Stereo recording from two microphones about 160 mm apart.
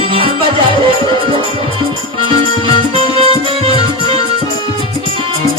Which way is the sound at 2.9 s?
35° right (ahead or behind).